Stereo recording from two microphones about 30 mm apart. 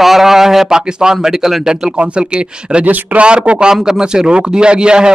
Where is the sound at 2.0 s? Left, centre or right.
Right.